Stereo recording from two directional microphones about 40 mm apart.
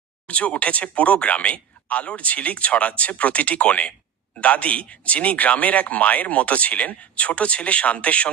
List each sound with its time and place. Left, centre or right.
0.3 s a man's voice: left